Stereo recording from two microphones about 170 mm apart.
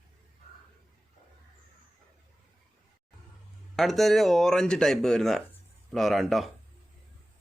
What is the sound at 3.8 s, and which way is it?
Speech, centre (ahead or behind).